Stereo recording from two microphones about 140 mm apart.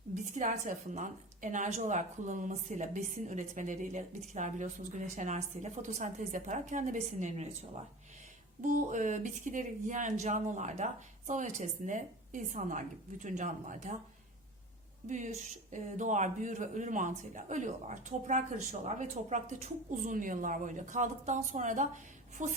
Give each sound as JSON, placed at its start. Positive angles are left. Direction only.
{"t": 0.1, "sound": "a woman's voice", "side_deg": -60}
{"t": 8.6, "sound": "a woman's voice", "side_deg": -65}
{"t": 15.0, "sound": "a woman's voice", "side_deg": -60}